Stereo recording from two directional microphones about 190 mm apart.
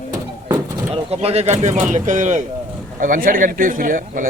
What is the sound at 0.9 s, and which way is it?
Speech, 35° right (ahead or behind).